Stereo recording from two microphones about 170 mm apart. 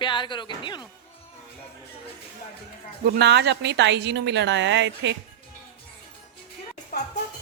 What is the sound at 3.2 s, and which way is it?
A woman's voice, 90° right.